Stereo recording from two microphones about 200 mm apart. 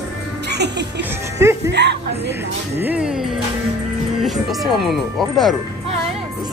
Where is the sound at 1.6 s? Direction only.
60° right (ahead or behind).